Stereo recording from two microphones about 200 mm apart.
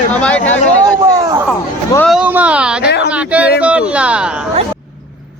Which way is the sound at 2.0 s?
5° right (ahead or behind).